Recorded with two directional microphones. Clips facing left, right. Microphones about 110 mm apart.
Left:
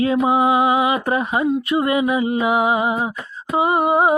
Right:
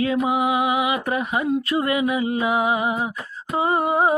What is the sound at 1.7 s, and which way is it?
Humming, 20° left (ahead or behind).